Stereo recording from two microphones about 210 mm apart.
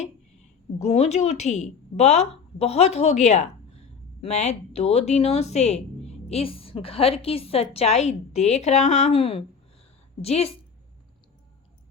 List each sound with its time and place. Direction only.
0.8 s a woman's voice: 30° left (ahead or behind)